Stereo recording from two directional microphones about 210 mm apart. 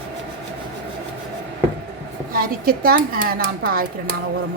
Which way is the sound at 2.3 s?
45° right (ahead or behind).